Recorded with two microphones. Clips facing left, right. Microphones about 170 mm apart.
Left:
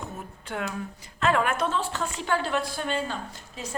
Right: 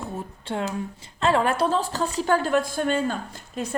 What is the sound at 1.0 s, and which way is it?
A woman's voice, 30° right (ahead or behind).